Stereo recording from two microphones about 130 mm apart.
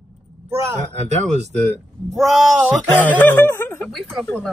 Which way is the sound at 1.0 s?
60° right (ahead or behind).